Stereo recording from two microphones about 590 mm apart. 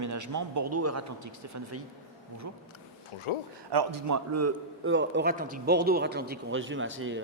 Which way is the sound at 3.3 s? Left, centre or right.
Left.